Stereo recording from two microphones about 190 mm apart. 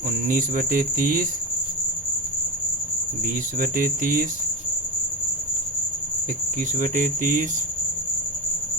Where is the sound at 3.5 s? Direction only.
45° right (ahead or behind).